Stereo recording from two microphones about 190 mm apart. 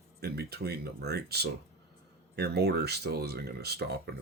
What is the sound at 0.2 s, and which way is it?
Speech, 55° right (ahead or behind).